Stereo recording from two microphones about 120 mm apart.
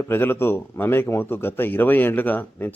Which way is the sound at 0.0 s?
20° left (ahead or behind).